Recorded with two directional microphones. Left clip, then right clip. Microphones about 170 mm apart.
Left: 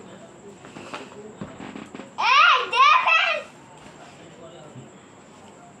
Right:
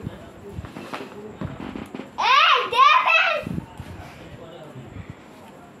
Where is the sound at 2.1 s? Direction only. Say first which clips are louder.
Even; 10° right (ahead or behind).